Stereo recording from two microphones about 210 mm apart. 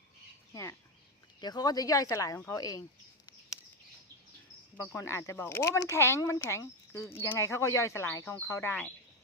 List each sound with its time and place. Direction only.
0.5 s speech: 15° left (ahead or behind)
4.8 s speech: 15° left (ahead or behind)